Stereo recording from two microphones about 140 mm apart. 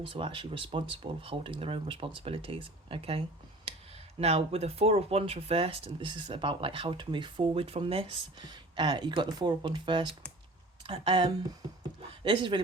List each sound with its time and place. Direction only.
0.0 s speech: 40° right (ahead or behind)
3.7 s a sound: 45° right (ahead or behind)
4.2 s speech: 50° right (ahead or behind)